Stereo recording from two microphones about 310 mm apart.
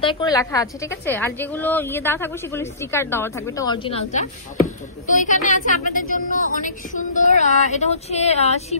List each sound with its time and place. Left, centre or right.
0.0 s a woman's voice: centre